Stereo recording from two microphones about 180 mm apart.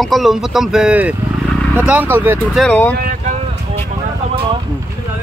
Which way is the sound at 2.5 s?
5° left (ahead or behind).